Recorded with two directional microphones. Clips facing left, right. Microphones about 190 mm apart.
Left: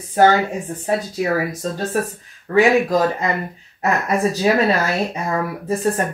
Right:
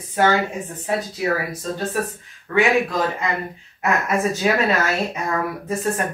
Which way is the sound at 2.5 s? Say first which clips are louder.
Left 4 dB; 30° left (ahead or behind).